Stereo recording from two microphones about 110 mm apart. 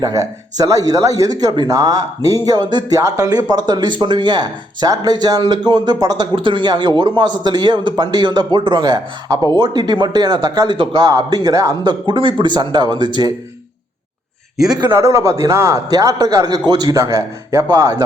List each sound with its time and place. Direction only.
0.0 s speech: 30° right (ahead or behind)
6.3 s speech: 50° right (ahead or behind); by 11.8 s 30° right (ahead or behind)
11.8 s speech: 45° right (ahead or behind)
14.8 s a man's voice: 35° right (ahead or behind)